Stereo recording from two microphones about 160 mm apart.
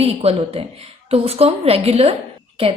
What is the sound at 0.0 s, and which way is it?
A woman's voice, 40° right (ahead or behind).